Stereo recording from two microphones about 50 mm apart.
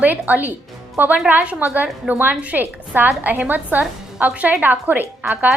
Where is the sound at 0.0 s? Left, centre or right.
Right.